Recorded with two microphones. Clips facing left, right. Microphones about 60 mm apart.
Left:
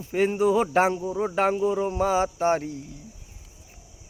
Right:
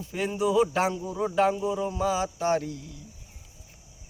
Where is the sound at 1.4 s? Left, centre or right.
Left.